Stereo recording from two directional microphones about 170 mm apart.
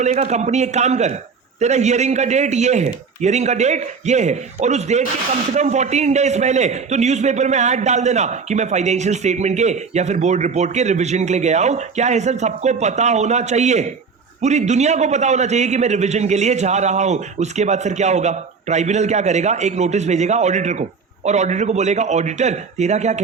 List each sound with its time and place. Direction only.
0.0 s a man's voice: 45° right (ahead or behind)